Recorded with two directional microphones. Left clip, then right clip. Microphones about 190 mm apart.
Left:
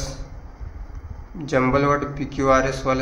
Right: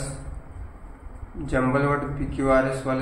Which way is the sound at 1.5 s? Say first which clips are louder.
Left 4 dB; 45° left (ahead or behind).